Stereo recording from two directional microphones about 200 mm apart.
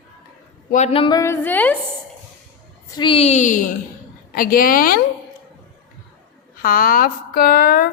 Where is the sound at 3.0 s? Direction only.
30° left (ahead or behind); by 5.0 s 45° left (ahead or behind).